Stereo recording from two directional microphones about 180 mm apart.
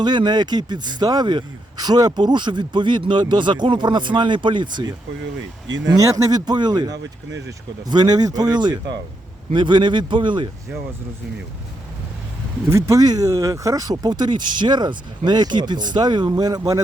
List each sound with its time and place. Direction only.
0.0 s a man's voice: 25° right (ahead or behind)
5.8 s a man's voice: 20° right (ahead or behind)
7.0 s speech: 90° right
7.9 s a man's voice: 20° right (ahead or behind)
12.6 s a man's voice: 15° right (ahead or behind)